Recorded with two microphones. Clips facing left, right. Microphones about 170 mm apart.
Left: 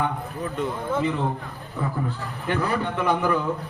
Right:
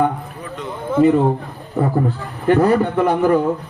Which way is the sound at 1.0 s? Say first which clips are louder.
Right 11 dB; 45° right (ahead or behind).